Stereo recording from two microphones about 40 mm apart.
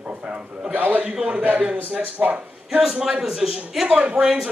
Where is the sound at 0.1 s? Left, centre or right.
Right.